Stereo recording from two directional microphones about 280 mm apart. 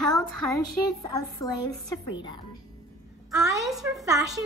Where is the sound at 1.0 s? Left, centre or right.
Centre.